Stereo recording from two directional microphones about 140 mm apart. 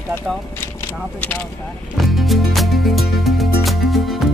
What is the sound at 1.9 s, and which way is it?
Music, centre (ahead or behind).